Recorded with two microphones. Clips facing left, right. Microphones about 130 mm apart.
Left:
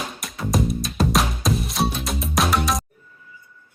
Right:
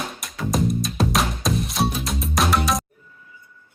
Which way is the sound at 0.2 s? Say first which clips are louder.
Even; centre (ahead or behind).